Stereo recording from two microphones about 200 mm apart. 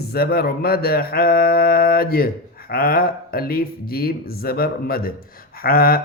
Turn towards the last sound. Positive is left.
turn(degrees=50)  # may be behind; listen again after turning